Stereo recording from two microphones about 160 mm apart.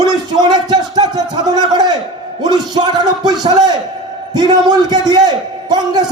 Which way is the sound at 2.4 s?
25° right (ahead or behind).